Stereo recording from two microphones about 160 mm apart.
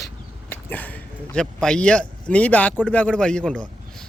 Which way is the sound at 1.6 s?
5° left (ahead or behind).